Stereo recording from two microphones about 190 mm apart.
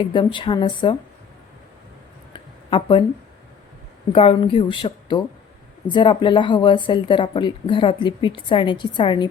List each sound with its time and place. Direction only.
0.0 s speech: 25° left (ahead or behind)
2.3 s a sound: 25° left (ahead or behind)
4.1 s speech: 30° left (ahead or behind)